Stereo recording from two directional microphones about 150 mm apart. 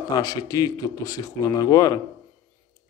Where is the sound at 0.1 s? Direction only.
25° left (ahead or behind).